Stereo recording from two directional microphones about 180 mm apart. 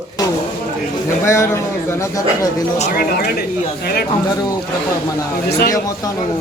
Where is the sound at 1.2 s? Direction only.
15° left (ahead or behind).